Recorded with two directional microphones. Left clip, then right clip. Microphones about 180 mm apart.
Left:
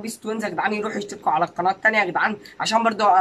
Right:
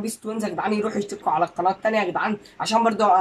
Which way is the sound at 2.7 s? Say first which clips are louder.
Left 1 dB; 15° right (ahead or behind).